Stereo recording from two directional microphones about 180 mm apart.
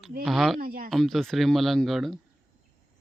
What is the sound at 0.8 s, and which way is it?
A child's voice, centre (ahead or behind).